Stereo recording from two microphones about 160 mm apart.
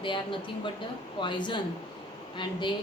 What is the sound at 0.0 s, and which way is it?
A woman's voice, 30° left (ahead or behind).